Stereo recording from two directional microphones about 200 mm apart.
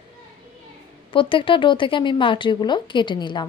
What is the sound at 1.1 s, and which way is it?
Speech, 25° left (ahead or behind).